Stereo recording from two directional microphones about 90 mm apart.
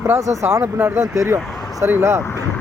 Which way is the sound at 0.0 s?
35° right (ahead or behind).